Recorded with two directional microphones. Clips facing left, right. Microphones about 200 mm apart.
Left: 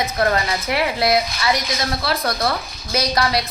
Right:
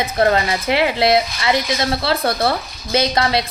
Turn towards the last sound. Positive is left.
turn(degrees=-25)  # may be behind; listen again after turning